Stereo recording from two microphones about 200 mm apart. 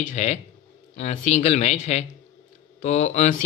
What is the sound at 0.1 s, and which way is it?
Speech, 35° left (ahead or behind).